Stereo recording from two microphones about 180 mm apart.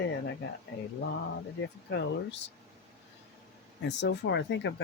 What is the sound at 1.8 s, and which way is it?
Speech, 75° left (ahead or behind).